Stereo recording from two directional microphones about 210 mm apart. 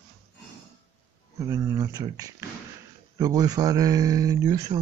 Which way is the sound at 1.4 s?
15° right (ahead or behind).